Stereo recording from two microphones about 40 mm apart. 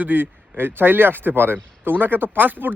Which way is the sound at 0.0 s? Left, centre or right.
Right.